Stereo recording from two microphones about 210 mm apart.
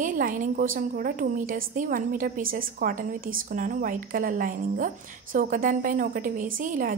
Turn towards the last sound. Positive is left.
turn(degrees=-40)  # may be behind; listen again after turning